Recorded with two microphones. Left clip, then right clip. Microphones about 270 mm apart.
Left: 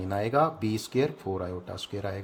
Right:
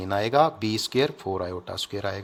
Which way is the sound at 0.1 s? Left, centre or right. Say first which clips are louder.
Right 5 dB; right.